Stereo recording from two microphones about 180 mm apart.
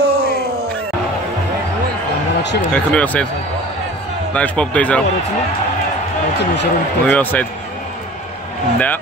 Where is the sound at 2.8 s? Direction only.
5° left (ahead or behind).